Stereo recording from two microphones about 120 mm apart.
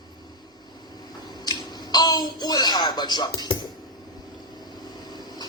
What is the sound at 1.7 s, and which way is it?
Speech, 35° left (ahead or behind).